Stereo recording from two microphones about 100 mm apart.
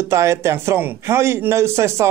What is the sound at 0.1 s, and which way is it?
A man's voice, 30° right (ahead or behind).